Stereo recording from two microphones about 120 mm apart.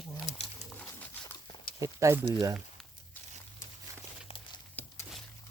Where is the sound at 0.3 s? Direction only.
75° left (ahead or behind).